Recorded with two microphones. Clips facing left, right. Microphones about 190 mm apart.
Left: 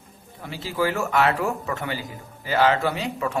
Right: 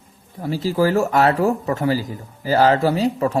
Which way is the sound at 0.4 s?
40° right (ahead or behind).